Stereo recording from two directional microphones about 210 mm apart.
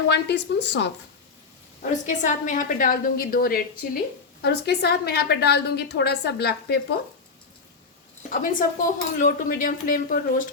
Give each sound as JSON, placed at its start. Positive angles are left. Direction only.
{"t": 0.1, "sound": "a woman's voice", "side_deg": 55}
{"t": 1.8, "sound": "a woman's voice", "side_deg": 35}
{"t": 8.3, "sound": "speech", "side_deg": 40}